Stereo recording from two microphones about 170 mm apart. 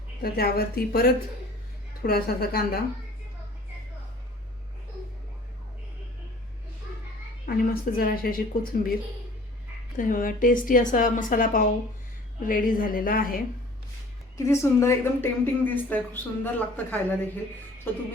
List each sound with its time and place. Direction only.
0.2 s a woman's voice: 65° left (ahead or behind)
7.4 s a woman's voice: 60° left (ahead or behind)
10.0 s a woman's voice: 55° left (ahead or behind)
14.3 s a woman's voice: 15° left (ahead or behind)